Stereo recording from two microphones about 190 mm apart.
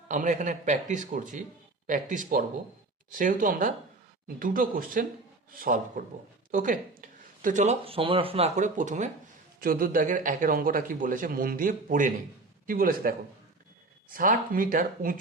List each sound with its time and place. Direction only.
0.1 s speech: 40° right (ahead or behind)